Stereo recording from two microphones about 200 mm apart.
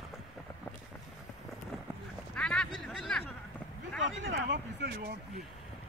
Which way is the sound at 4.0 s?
65° right (ahead or behind).